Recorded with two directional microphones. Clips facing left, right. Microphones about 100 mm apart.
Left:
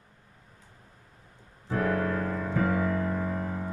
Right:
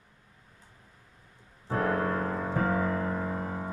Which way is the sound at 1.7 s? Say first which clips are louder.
Even; 35° right (ahead or behind).